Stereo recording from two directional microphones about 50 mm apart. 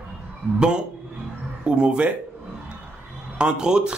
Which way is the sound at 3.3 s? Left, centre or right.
Centre.